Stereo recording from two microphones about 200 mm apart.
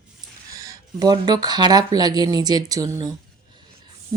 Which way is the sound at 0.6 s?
20° right (ahead or behind).